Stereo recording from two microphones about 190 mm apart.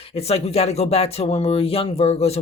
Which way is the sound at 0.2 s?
35° left (ahead or behind).